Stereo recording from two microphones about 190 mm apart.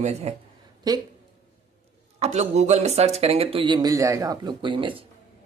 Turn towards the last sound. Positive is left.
turn(degrees=-25)  # may be behind; listen again after turning